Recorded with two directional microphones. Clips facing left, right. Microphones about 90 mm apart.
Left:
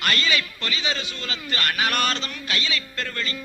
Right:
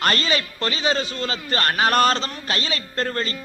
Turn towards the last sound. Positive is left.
turn(degrees=-40)  # may be behind; listen again after turning